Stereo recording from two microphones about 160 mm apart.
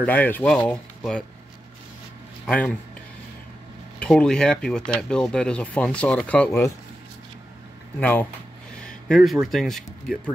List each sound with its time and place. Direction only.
0.0 s speech: 10° left (ahead or behind)
2.4 s a man's voice: 5° left (ahead or behind)
4.0 s speech: 5° left (ahead or behind)
8.0 s speech: 10° left (ahead or behind)